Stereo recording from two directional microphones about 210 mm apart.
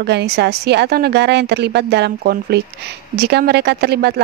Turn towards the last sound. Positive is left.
turn(degrees=-50)  # may be behind; listen again after turning